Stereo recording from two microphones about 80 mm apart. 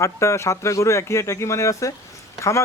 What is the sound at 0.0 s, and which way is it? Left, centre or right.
A man's voice, left.